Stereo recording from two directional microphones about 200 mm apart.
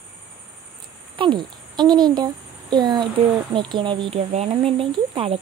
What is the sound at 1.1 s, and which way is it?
A child's voice, 25° right (ahead or behind).